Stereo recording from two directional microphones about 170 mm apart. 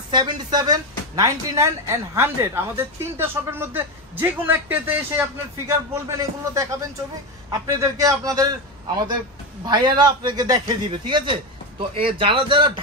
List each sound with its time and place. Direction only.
0.1 s a man's voice: 25° right (ahead or behind)